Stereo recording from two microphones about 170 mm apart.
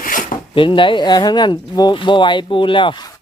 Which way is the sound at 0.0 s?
55° left (ahead or behind).